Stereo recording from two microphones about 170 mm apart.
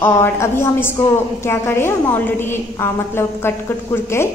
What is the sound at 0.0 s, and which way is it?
A woman's voice, 15° left (ahead or behind).